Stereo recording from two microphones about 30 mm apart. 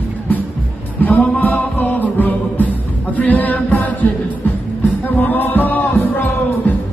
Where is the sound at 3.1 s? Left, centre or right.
Left.